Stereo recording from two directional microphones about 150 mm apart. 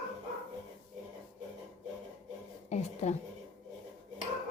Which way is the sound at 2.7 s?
50° left (ahead or behind).